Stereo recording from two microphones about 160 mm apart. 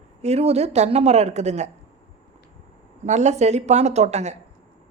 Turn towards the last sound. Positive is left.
turn(degrees=-45)  # may be behind; listen again after turning